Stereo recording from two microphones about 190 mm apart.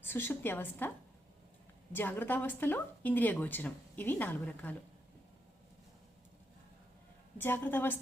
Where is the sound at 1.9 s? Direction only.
10° left (ahead or behind).